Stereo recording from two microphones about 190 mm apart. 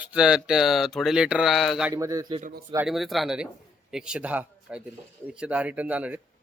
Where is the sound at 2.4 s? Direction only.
50° right (ahead or behind).